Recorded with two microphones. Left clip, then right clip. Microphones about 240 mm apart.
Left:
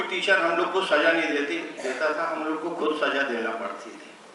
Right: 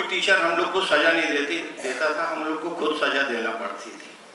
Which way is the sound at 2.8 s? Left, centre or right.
Centre.